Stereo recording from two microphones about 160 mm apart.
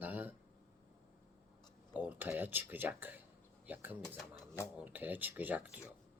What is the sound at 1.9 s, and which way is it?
Speech, 10° right (ahead or behind).